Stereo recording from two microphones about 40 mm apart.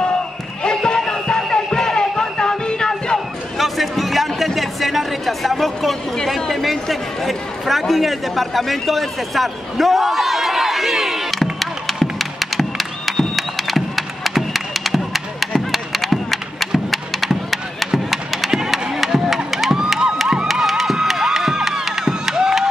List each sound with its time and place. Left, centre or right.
0.6 s music: left
3.5 s a sound: centre
11.6 s music: centre